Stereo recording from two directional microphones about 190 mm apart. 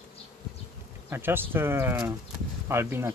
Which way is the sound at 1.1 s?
10° right (ahead or behind).